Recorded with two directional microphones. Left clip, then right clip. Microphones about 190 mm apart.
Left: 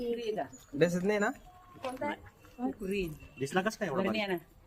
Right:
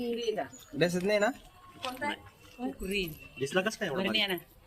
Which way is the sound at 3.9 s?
50° left (ahead or behind).